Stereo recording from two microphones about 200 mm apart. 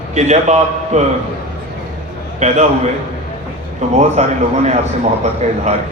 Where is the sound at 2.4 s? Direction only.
35° right (ahead or behind).